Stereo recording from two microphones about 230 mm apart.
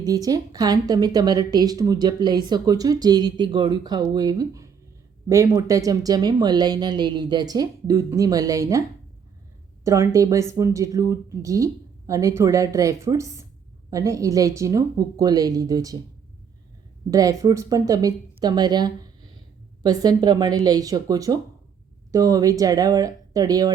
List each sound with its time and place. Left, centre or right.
0.0 s a woman's voice: centre
9.8 s a woman's voice: centre
17.1 s a woman's voice: centre